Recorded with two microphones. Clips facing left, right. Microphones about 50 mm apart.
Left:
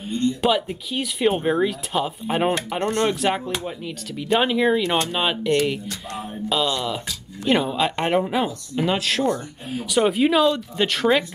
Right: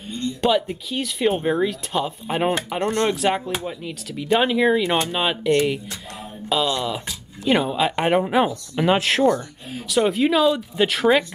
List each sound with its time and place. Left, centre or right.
0.4 s speech: centre
6.1 s music: centre
7.4 s speech: centre
8.7 s speech: right
9.7 s speech: centre